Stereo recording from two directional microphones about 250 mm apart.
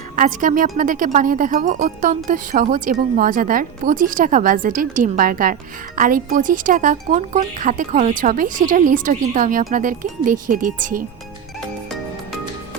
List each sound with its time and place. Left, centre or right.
0.2 s speech: right